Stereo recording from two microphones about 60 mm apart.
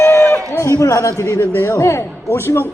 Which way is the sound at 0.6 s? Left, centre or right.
Left.